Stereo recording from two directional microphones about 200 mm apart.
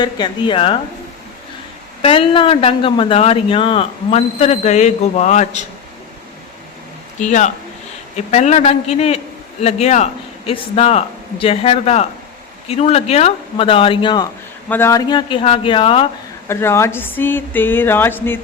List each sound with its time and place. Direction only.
0.0 s speech: 25° left (ahead or behind)
2.0 s speech: 25° left (ahead or behind)
7.2 s a man's voice: 40° left (ahead or behind)
14.7 s speech: 10° left (ahead or behind)
16.5 s speech: 10° left (ahead or behind)